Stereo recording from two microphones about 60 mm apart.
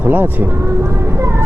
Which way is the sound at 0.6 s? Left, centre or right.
Right.